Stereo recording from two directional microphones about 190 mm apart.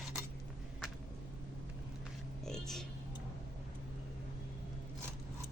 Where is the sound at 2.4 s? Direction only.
5° left (ahead or behind).